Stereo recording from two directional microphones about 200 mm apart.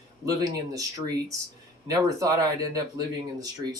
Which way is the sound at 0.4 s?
20° right (ahead or behind).